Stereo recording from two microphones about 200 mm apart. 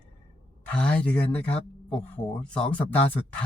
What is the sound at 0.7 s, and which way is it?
Speech, 5° left (ahead or behind).